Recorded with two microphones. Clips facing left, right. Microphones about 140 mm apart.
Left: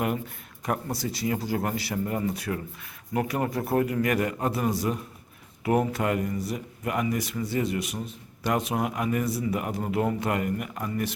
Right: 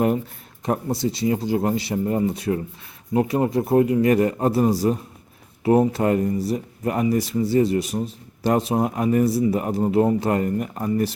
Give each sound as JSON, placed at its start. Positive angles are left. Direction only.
{"t": 0.6, "sound": "speech", "side_deg": -25}